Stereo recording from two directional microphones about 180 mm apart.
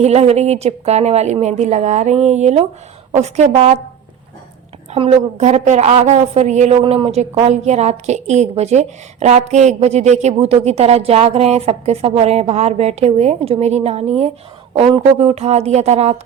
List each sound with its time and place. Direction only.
0.0 s a woman's voice: 35° right (ahead or behind)
4.9 s a woman's voice: 35° right (ahead or behind)